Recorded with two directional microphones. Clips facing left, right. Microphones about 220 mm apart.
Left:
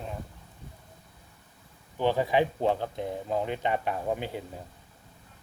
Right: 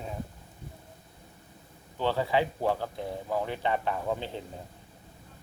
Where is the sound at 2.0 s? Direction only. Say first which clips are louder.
Left 2 dB; 15° left (ahead or behind).